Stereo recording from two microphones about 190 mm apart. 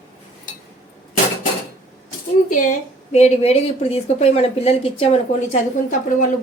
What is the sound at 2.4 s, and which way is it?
Speech, 45° left (ahead or behind).